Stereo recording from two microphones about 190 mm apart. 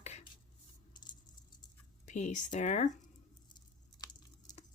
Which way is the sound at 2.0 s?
40° left (ahead or behind).